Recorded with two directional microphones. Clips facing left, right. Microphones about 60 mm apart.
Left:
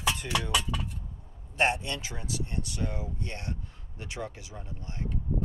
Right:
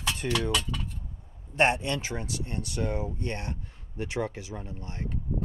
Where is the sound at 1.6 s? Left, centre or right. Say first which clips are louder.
Right 3 dB; right.